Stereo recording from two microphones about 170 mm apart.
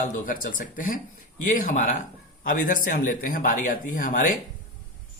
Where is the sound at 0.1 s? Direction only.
50° left (ahead or behind).